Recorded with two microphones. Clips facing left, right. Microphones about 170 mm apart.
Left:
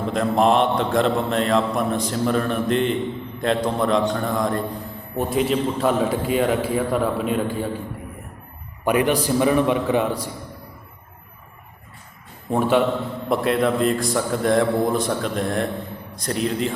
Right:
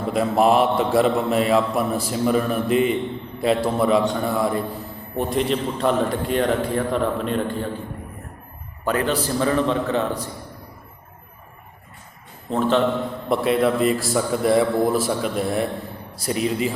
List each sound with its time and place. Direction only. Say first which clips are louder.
0.1 s a man's voice: right 1 dB; 5° right (ahead or behind)
8.8 s a man's voice: left 3 dB; 15° left (ahead or behind)
12.5 s a man's voice: left 1 dB; 10° left (ahead or behind)
13.2 s a man's voice: right 1 dB; centre (ahead or behind)